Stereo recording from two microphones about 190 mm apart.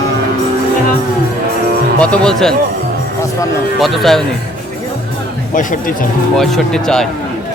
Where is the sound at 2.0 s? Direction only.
5° left (ahead or behind).